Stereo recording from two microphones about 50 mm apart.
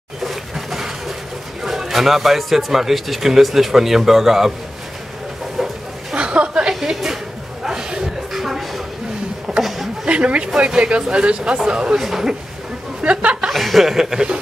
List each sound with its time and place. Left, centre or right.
0.2 s a sound: centre
1.6 s a man's voice: centre
5.6 s chicken: centre
6.1 s chuckle: right
6.7 s a sound: centre
10.0 s speech: right; by 12.4 s centre
13.0 s speech: right
13.5 s speech: centre